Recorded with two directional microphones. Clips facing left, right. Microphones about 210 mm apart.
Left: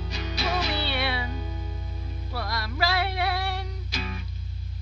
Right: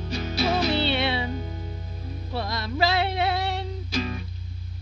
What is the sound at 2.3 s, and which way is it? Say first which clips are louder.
Music: right 4 dB; 25° right (ahead or behind).